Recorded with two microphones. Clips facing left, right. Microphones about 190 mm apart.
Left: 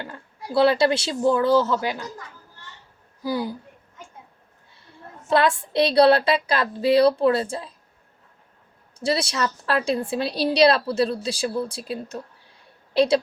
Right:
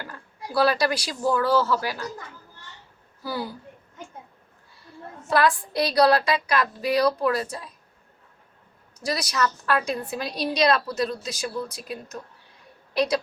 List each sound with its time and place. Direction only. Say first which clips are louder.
0.0 s speech: left 2 dB; 25° left (ahead or behind)
3.2 s a woman's voice: left 5 dB; 15° left (ahead or behind)
5.3 s a woman's voice: left 2 dB; 25° left (ahead or behind)
9.0 s a woman's voice: left 2 dB; 25° left (ahead or behind)